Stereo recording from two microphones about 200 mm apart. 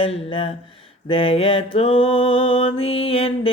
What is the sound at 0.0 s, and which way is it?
Music, 25° left (ahead or behind).